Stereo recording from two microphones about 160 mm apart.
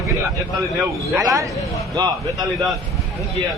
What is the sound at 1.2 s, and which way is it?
Speech, 20° right (ahead or behind).